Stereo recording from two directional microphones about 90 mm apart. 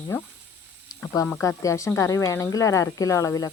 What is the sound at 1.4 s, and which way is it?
A woman's voice, 35° left (ahead or behind).